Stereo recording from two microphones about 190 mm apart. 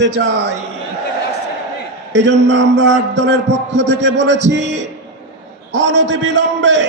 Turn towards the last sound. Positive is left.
turn(degrees=-70)  # may be behind; listen again after turning